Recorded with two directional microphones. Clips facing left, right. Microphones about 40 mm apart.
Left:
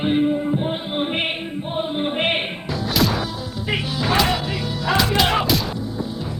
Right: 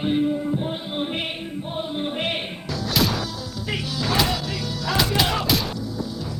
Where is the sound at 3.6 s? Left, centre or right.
Left.